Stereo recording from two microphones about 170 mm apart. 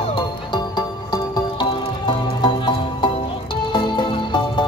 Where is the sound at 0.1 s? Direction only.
25° left (ahead or behind).